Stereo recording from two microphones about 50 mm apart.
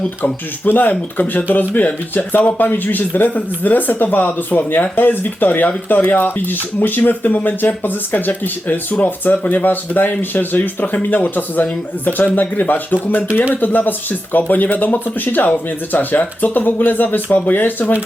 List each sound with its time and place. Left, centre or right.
0.2 s speech: left